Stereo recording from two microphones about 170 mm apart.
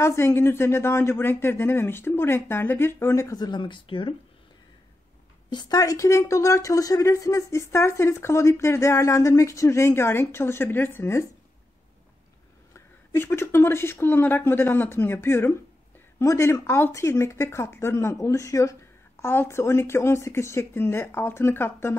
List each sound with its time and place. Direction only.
0.0 s speech: 15° left (ahead or behind); by 4.1 s 30° left (ahead or behind)
5.5 s speech: 25° left (ahead or behind)
12.7 s speech: 15° left (ahead or behind)